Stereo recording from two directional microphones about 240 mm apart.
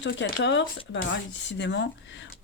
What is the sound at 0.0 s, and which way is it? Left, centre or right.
Speech, left.